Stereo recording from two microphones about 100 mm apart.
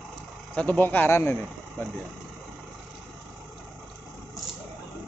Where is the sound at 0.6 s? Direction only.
15° left (ahead or behind).